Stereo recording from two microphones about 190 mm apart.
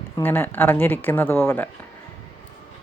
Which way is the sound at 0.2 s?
10° left (ahead or behind).